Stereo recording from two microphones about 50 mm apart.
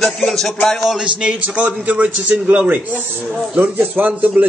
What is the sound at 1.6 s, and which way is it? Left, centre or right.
A man's voice, right.